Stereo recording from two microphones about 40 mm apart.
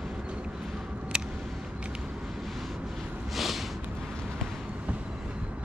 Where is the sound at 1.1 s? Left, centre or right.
Centre.